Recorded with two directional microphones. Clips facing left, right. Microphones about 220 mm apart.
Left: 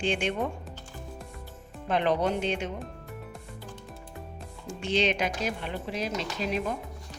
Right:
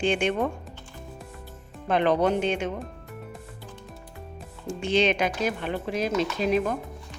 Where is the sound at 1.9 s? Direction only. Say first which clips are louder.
Right 4 dB; 55° right (ahead or behind).